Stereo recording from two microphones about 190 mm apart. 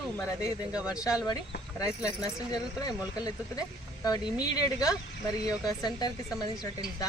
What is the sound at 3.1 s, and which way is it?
Speech, 20° left (ahead or behind).